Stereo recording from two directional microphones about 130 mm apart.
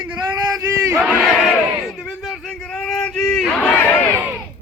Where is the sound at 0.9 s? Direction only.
Centre (ahead or behind).